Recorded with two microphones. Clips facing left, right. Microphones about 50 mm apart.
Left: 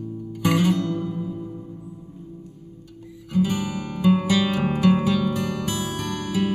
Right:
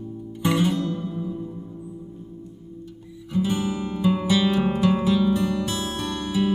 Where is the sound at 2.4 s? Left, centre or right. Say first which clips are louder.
Right 3 dB; centre.